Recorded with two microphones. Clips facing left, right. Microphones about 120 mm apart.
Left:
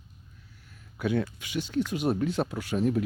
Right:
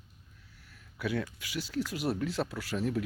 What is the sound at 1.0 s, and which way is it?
Speech, 25° left (ahead or behind).